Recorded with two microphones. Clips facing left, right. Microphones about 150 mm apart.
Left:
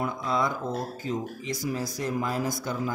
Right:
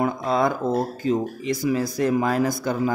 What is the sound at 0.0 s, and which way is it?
Speech, 60° right (ahead or behind).